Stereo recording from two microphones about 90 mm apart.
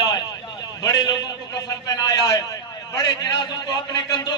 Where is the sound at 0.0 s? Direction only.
45° left (ahead or behind).